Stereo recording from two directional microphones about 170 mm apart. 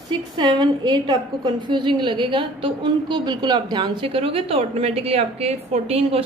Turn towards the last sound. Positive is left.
turn(degrees=-35)  # may be behind; listen again after turning